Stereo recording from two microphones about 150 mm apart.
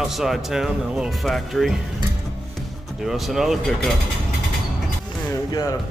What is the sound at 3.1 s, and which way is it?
Speech, centre (ahead or behind).